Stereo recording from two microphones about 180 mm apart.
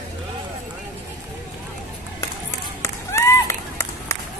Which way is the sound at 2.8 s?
15° left (ahead or behind).